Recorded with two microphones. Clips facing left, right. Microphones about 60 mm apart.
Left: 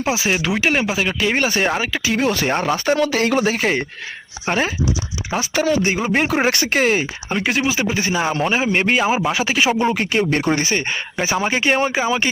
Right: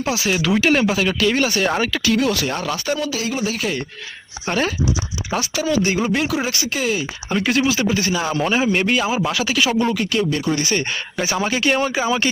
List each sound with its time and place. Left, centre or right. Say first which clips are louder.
0.0 s speech: left 1 dB; left
1.3 s a man's voice: even; left
1.9 s speech: right 2 dB; centre
2.1 s speech: left 1 dB; left
3.0 s speech: left 6 dB; left
3.5 s speech: left 4 dB; left
4.4 s a man's voice: left 1 dB; left
5.8 s a man's voice: even; left
6.1 s speech: left 3 dB; left
7.3 s a man's voice: right 3 dB; centre
9.9 s speech: left 2 dB; left
10.8 s a man's voice: left 1 dB; centre